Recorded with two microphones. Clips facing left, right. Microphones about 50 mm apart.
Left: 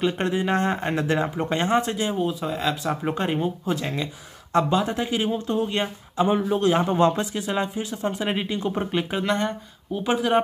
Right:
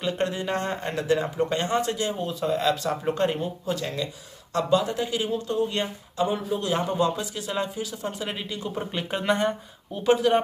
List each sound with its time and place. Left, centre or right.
0.0 s speech: left
2.2 s speech: centre; by 7.0 s left
7.0 s speech: left
7.3 s speech: left
9.2 s speech: centre
9.9 s speech: centre